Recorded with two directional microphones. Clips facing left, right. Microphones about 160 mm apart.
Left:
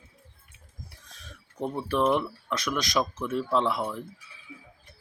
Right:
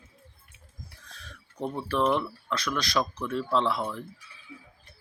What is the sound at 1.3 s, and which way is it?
Speech, 5° left (ahead or behind).